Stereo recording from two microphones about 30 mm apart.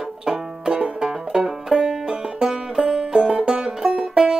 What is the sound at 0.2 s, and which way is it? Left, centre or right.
Banjo, right.